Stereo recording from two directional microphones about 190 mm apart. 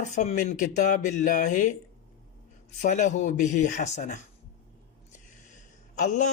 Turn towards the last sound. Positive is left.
turn(degrees=40)  # may be behind; listen again after turning